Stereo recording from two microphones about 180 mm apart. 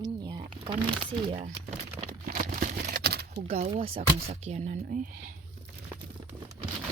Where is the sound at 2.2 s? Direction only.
50° right (ahead or behind).